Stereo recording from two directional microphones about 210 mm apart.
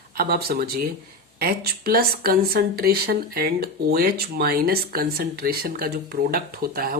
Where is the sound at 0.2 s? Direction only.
50° right (ahead or behind).